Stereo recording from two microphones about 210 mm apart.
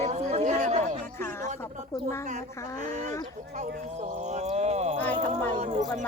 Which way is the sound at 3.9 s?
35° right (ahead or behind).